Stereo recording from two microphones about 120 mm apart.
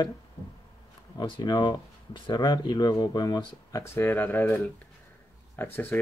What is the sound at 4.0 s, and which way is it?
Speech, 15° left (ahead or behind).